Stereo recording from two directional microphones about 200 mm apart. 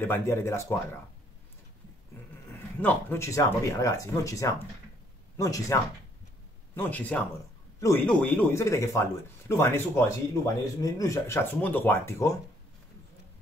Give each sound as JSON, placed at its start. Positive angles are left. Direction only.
{"t": 0.0, "sound": "speech", "side_deg": 10}
{"t": 2.8, "sound": "speech", "side_deg": 10}